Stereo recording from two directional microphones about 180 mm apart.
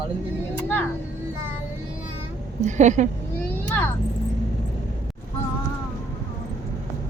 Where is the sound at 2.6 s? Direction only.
40° right (ahead or behind).